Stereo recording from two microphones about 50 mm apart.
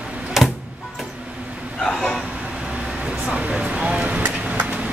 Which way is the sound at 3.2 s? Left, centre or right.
Right.